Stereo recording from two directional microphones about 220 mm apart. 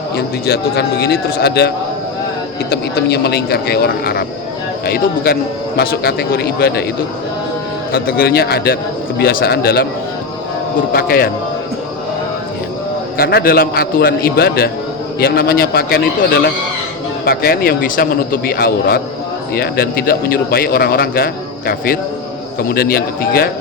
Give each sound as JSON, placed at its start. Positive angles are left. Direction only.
{"t": 0.2, "sound": "a man's voice", "side_deg": 50}
{"t": 7.9, "sound": "a man's voice", "side_deg": 40}
{"t": 10.9, "sound": "a man's voice", "side_deg": 45}
{"t": 13.1, "sound": "a man's voice", "side_deg": 45}
{"t": 22.7, "sound": "a man's voice", "side_deg": 45}